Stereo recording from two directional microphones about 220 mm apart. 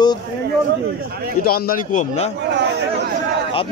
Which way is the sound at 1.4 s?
40° left (ahead or behind).